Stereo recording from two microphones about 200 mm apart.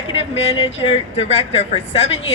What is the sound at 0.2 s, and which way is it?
A woman's voice, 30° left (ahead or behind).